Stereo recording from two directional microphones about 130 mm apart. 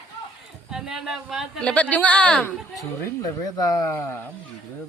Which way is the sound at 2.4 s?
25° left (ahead or behind).